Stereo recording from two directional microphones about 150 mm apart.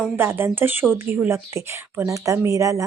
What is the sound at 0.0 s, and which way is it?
Speech, 15° right (ahead or behind).